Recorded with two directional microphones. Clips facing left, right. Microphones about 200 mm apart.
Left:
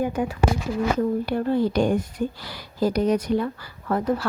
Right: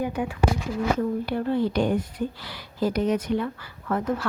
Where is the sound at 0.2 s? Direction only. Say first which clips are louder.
Left 2 dB; 45° left (ahead or behind).